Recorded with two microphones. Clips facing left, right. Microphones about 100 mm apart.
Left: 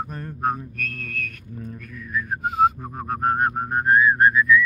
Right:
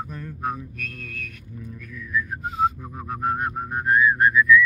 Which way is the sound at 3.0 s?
50° left (ahead or behind).